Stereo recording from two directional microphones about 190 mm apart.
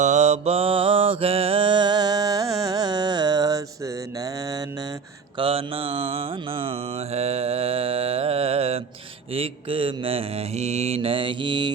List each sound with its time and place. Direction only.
0.0 s mantra: 35° right (ahead or behind); by 4.6 s 20° right (ahead or behind)
5.4 s mantra: 30° right (ahead or behind)